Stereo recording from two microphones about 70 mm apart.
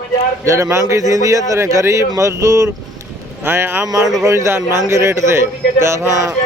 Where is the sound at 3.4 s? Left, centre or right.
Right.